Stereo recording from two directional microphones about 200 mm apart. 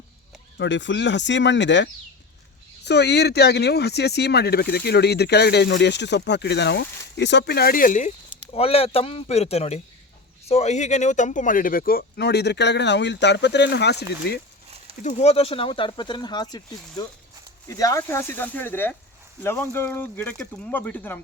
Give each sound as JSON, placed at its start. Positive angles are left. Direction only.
{"t": 0.6, "sound": "speech", "side_deg": 65}
{"t": 8.5, "sound": "speech", "side_deg": 30}
{"t": 15.0, "sound": "speech", "side_deg": 30}